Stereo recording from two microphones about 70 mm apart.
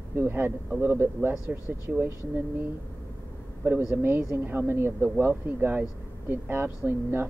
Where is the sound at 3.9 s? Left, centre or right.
Right.